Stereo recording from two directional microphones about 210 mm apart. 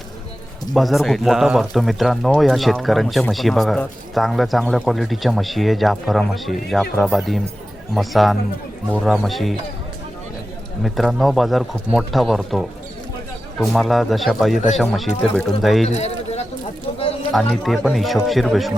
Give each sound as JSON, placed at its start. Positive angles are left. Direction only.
{"t": 0.7, "sound": "speech", "side_deg": 0}
{"t": 10.8, "sound": "speech", "side_deg": 0}
{"t": 15.9, "sound": "a sound", "side_deg": 30}
{"t": 17.3, "sound": "speech", "side_deg": 0}